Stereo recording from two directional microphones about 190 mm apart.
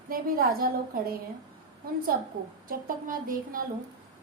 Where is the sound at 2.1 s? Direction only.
50° right (ahead or behind).